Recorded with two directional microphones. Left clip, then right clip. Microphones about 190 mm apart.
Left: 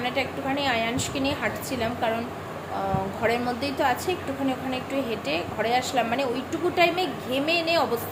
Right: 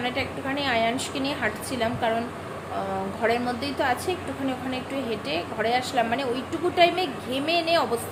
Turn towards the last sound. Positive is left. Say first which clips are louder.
# even
turn(degrees=0)  # may be behind; listen again after turning